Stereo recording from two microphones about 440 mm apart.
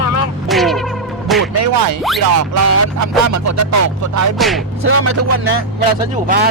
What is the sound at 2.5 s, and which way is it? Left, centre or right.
Speech, right.